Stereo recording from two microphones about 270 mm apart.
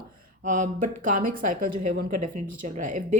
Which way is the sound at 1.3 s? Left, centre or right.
Right.